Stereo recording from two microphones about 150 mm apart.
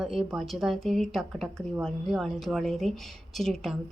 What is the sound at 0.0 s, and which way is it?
Speech, centre (ahead or behind).